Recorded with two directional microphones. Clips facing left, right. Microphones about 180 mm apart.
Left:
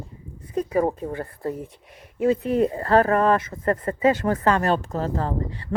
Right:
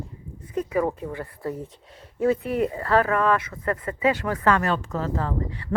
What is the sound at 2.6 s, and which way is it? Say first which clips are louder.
Speech: left 3 dB; 40° left (ahead or behind).